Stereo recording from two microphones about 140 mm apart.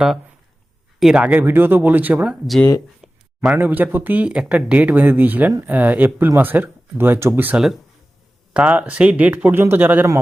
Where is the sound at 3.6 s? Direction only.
10° right (ahead or behind).